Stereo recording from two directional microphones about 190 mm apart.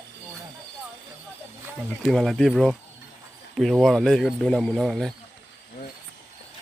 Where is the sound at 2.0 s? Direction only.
Centre (ahead or behind).